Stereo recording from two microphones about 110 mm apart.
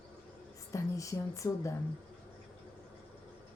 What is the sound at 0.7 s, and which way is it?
Speech, 30° left (ahead or behind).